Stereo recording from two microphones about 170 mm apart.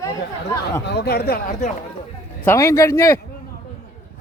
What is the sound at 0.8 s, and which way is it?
Speech, 75° left (ahead or behind).